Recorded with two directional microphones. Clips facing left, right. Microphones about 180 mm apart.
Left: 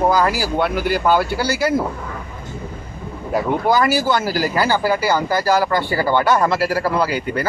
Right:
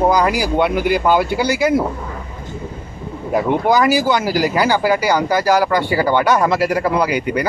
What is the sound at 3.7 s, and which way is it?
Speech, 15° right (ahead or behind).